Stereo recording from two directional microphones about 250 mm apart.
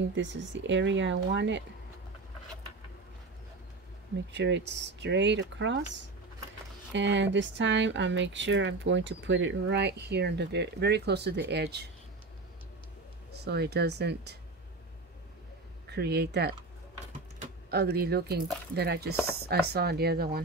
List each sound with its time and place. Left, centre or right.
0.1 s speech: right
4.3 s speech: right
13.4 s speech: right
15.9 s speech: right
17.6 s speech: right